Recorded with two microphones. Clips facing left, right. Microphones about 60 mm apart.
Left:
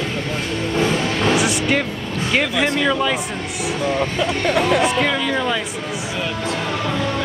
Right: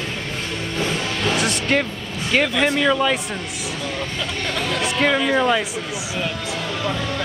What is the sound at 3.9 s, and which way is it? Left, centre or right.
Speech, left.